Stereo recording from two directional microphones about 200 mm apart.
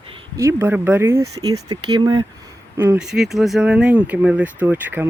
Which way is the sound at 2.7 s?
10° right (ahead or behind).